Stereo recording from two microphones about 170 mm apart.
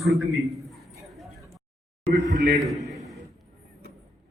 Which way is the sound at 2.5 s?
Centre (ahead or behind).